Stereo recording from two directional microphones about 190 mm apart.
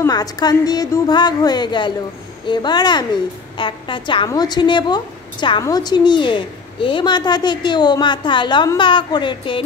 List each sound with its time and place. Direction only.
0.0 s a woman's voice: 20° left (ahead or behind)